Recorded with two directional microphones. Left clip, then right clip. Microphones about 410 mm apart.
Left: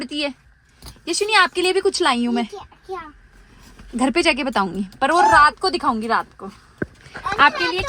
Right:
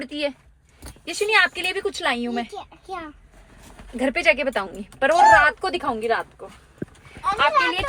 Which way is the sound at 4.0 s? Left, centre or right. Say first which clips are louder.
Left 1 dB; centre.